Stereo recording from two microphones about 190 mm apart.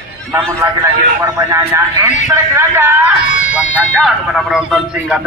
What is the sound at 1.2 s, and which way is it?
Speech, 15° right (ahead or behind).